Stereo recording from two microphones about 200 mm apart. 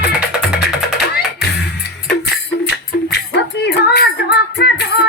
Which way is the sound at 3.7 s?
55° left (ahead or behind).